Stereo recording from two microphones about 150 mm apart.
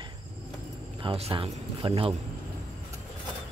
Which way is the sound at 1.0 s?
40° right (ahead or behind).